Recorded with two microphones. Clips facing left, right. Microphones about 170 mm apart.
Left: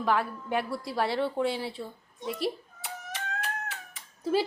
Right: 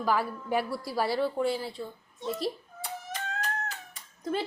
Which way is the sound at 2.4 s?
5° left (ahead or behind).